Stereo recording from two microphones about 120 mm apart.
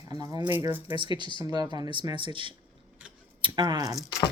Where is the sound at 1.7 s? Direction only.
40° right (ahead or behind).